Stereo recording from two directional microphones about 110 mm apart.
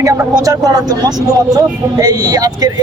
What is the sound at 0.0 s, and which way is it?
Speech, 30° right (ahead or behind).